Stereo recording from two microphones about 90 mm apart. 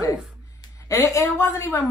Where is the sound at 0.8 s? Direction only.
35° left (ahead or behind).